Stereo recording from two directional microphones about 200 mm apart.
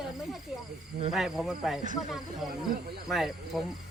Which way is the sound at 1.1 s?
Centre (ahead or behind).